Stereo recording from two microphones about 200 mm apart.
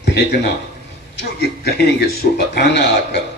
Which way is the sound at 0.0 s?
55° left (ahead or behind).